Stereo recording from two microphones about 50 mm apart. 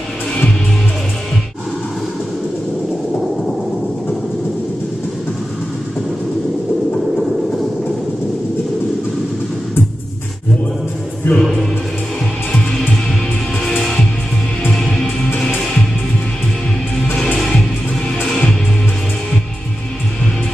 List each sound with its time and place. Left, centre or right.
11.3 s music: left
13.7 s music: centre